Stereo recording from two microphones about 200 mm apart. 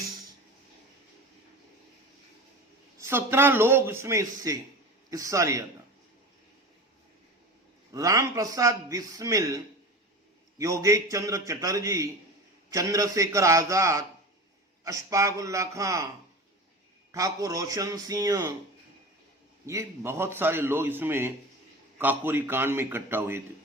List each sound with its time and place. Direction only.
3.0 s a man's voice: 10° right (ahead or behind)
7.9 s a man's voice: 15° right (ahead or behind)
10.6 s a man's voice: 15° right (ahead or behind)
17.1 s a man's voice: 15° right (ahead or behind)
19.6 s a man's voice: 15° right (ahead or behind)